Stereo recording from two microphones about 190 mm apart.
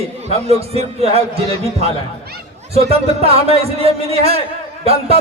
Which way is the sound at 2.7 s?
30° right (ahead or behind).